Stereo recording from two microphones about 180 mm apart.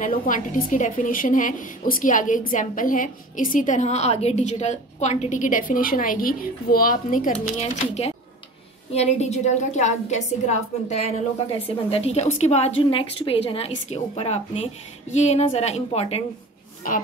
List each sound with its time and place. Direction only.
0.0 s a woman's voice: 45° left (ahead or behind)